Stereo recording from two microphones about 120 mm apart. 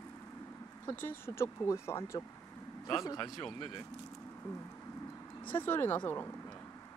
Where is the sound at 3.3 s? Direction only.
5° left (ahead or behind).